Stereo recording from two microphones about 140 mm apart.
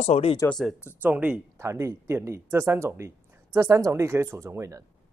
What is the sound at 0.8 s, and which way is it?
Speech, 15° right (ahead or behind).